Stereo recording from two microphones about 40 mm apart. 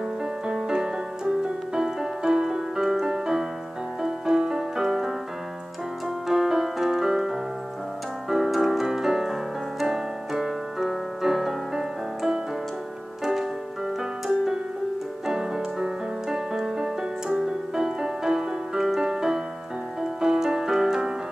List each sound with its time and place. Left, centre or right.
0.2 s music: centre